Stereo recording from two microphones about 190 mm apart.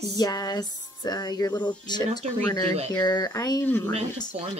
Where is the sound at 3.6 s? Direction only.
10° left (ahead or behind).